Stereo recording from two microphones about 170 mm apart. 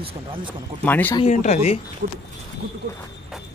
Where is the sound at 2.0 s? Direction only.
60° right (ahead or behind).